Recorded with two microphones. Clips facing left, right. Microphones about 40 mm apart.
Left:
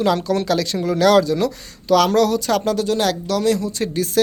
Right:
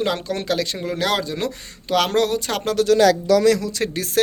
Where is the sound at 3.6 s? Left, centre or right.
Right.